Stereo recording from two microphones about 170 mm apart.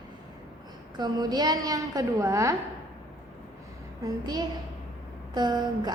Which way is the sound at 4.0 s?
25° right (ahead or behind).